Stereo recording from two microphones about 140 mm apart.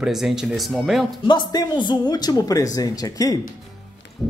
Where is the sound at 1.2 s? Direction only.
35° left (ahead or behind).